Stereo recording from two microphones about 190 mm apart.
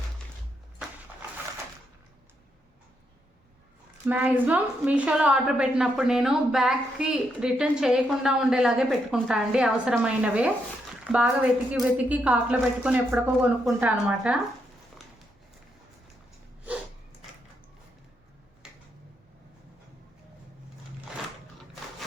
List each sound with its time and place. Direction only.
4.0 s a woman's voice: 10° right (ahead or behind)